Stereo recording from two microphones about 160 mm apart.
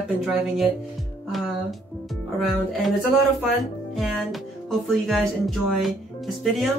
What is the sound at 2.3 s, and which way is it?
Speech, centre (ahead or behind).